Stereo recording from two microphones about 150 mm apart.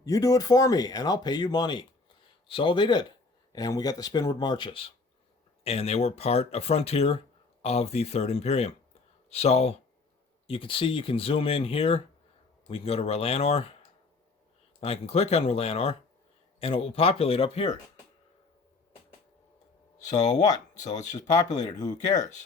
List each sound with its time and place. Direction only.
0.0 s speech: 25° left (ahead or behind); by 13.7 s 40° left (ahead or behind)
14.8 s speech: 40° left (ahead or behind)
20.1 s speech: 50° left (ahead or behind)
21.6 s speech: 25° left (ahead or behind)